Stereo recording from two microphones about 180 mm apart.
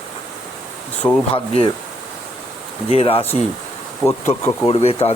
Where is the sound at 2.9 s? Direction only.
30° left (ahead or behind).